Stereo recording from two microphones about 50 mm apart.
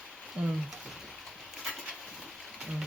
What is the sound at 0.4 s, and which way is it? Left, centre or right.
Speech, right.